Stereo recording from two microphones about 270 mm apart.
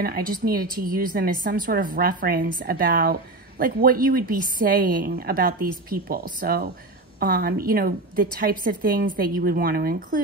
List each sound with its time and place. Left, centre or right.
0.0 s a woman's voice: right